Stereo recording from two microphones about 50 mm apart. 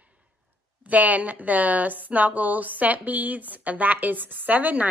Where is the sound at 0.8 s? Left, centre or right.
Right.